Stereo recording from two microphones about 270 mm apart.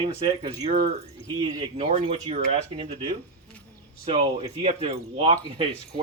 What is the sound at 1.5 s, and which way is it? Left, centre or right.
Speech, centre.